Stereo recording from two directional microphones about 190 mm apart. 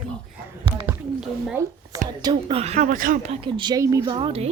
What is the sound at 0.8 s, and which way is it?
Speech, 5° right (ahead or behind).